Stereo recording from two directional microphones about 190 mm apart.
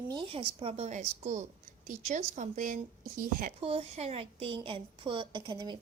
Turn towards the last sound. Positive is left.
turn(degrees=-20)  # may be behind; listen again after turning